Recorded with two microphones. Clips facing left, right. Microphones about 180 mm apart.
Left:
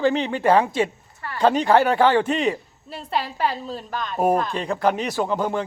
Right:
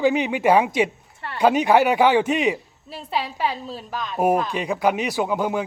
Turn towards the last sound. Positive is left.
turn(degrees=-10)  # may be behind; listen again after turning